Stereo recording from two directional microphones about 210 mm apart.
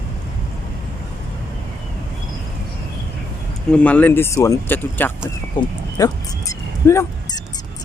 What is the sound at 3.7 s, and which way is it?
Speech, 5° left (ahead or behind).